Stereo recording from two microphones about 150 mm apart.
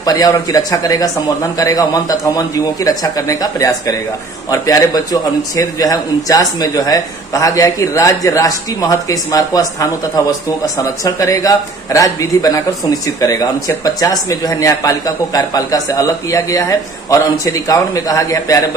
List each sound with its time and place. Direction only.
0.0 s speech: 25° left (ahead or behind)